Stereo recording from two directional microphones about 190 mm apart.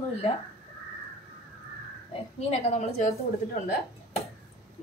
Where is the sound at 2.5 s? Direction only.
35° left (ahead or behind).